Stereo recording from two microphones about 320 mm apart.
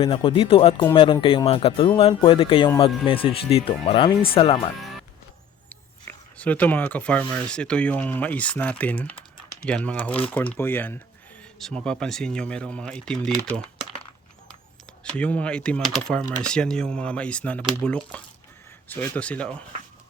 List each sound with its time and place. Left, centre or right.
0.0 s speech: centre
4.8 s music: centre
5.6 s speech: centre
15.1 s speech: centre